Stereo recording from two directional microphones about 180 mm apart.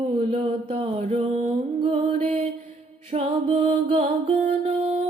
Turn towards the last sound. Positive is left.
turn(degrees=-35)  # may be behind; listen again after turning